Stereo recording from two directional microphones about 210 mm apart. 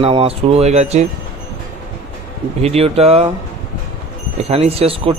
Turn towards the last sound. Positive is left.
turn(degrees=-30)  # may be behind; listen again after turning